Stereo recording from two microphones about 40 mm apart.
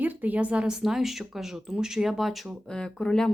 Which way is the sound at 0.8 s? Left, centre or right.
Centre.